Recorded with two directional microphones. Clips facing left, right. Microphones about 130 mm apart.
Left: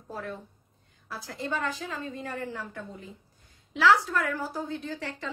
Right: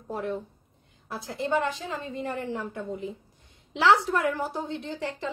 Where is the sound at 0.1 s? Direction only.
25° right (ahead or behind).